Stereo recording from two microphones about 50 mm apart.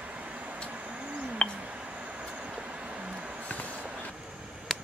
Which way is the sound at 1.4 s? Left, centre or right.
Left.